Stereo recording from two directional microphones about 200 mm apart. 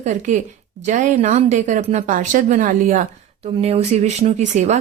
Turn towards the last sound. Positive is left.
turn(degrees=-35)  # may be behind; listen again after turning